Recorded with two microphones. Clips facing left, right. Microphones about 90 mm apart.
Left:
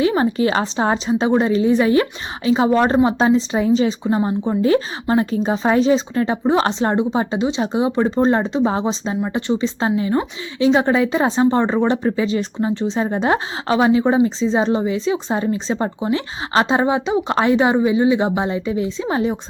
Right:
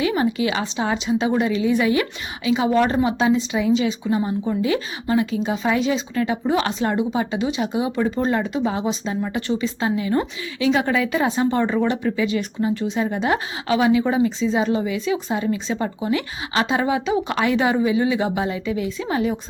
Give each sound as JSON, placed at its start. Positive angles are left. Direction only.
{"t": 0.0, "sound": "a woman's voice", "side_deg": 35}